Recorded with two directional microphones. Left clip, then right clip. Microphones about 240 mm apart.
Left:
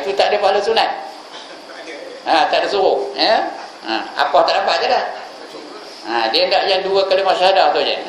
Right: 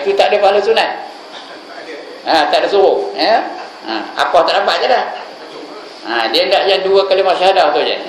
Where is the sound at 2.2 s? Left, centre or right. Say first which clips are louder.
Right 3 dB; centre.